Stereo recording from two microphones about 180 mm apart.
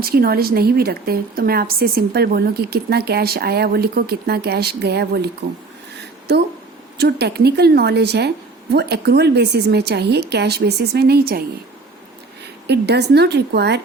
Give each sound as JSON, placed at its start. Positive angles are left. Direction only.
{"t": 0.0, "sound": "a woman's voice", "side_deg": -55}
{"t": 7.0, "sound": "a woman's voice", "side_deg": -65}
{"t": 12.6, "sound": "a woman's voice", "side_deg": -65}